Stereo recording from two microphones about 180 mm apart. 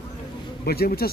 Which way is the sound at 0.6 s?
60° left (ahead or behind).